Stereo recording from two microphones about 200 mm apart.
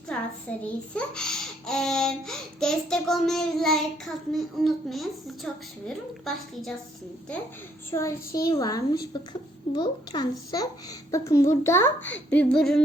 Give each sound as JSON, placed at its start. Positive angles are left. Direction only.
{"t": 0.5, "sound": "a child's voice", "side_deg": 5}
{"t": 7.9, "sound": "a child's voice", "side_deg": 15}